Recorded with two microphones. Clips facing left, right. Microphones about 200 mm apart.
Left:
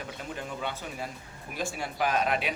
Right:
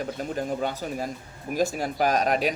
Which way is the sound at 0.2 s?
40° right (ahead or behind).